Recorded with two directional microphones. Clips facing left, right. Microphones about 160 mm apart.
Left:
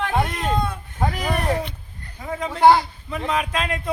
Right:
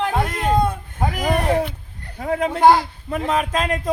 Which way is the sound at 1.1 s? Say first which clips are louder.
Right 7 dB; 45° right (ahead or behind).